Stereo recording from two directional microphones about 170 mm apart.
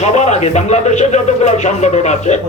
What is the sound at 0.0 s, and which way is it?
Speech, 40° left (ahead or behind).